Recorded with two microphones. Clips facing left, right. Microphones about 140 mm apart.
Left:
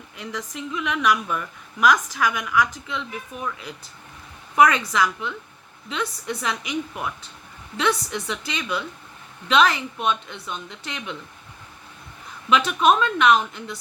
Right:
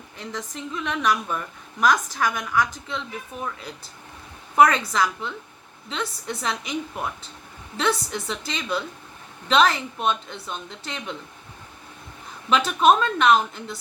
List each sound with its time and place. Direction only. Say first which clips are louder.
0.2 s speech: left 1 dB; 30° right (ahead or behind)
4.5 s speech: even; 30° right (ahead or behind)
12.5 s speech: even; 35° right (ahead or behind)